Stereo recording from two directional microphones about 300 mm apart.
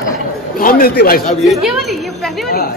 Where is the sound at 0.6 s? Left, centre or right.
Left.